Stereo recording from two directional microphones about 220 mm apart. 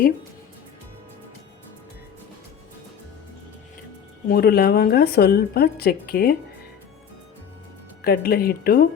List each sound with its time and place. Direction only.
4.3 s speech: 45° left (ahead or behind)
8.0 s speech: 45° left (ahead or behind)